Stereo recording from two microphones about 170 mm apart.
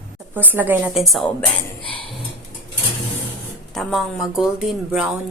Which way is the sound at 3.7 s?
Centre (ahead or behind).